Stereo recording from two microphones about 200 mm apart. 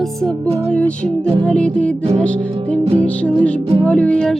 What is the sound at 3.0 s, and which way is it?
Music, 5° left (ahead or behind).